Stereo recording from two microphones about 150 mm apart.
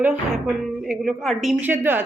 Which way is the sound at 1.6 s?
15° right (ahead or behind).